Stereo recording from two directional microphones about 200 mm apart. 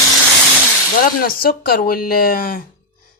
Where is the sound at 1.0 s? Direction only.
50° left (ahead or behind).